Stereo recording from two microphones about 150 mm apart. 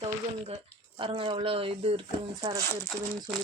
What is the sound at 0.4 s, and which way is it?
Speech, 35° right (ahead or behind).